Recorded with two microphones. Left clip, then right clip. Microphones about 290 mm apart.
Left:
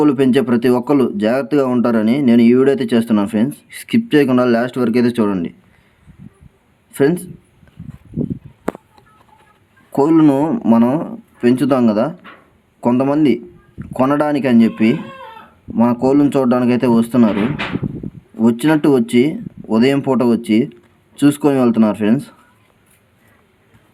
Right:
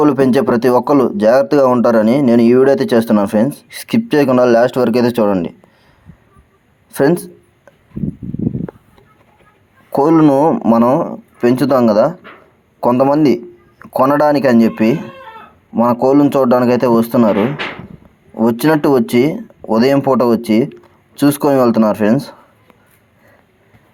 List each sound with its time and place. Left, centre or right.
0.0 s speech: centre
6.9 s speech: centre
9.9 s speech: centre
18.3 s speech: centre